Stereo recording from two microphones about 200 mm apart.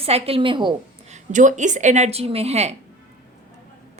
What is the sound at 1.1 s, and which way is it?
A woman's voice, 40° right (ahead or behind).